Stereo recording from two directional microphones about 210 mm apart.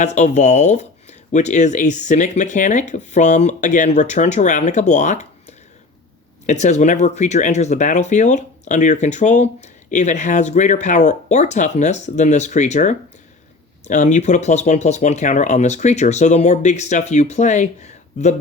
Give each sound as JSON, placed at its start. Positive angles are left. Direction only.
{"t": 0.0, "sound": "speech", "side_deg": 35}